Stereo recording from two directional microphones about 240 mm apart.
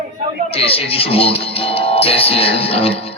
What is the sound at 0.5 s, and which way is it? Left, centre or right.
Speech, left.